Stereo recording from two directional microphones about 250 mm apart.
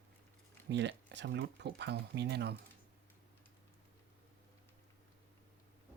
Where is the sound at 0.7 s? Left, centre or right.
Right.